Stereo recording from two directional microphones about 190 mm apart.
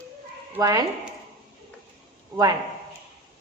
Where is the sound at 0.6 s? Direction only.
20° right (ahead or behind).